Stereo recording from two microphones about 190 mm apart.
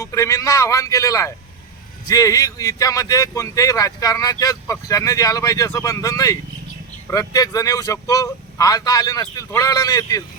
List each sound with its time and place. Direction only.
0.0 s speech: 15° left (ahead or behind)